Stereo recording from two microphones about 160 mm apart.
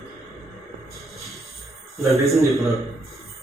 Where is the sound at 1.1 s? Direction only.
Centre (ahead or behind).